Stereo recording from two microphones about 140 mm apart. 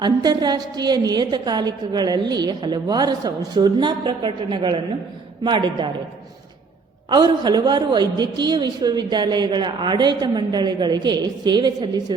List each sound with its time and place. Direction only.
0.0 s a woman's voice: 30° right (ahead or behind)
7.1 s a woman's voice: 30° right (ahead or behind)